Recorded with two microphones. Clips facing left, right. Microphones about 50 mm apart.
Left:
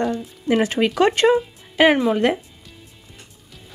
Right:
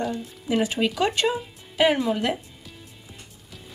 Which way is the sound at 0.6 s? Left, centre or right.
Left.